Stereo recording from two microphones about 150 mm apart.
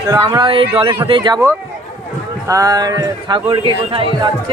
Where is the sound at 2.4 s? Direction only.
25° right (ahead or behind).